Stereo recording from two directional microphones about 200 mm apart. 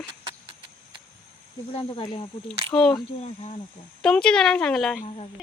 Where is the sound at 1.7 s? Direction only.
30° left (ahead or behind).